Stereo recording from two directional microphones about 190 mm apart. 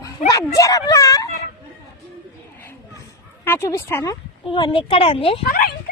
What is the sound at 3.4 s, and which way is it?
Speech, 10° left (ahead or behind).